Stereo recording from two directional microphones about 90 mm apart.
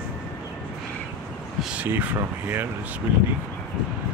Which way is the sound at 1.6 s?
10° right (ahead or behind).